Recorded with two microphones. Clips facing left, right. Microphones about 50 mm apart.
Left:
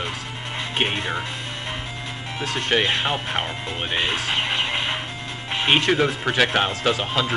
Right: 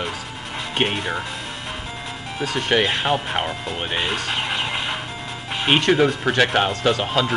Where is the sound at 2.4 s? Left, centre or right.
Centre.